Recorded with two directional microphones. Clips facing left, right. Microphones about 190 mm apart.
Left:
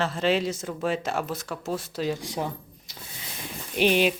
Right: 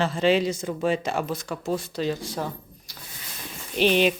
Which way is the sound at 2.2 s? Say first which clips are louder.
Even; 15° left (ahead or behind).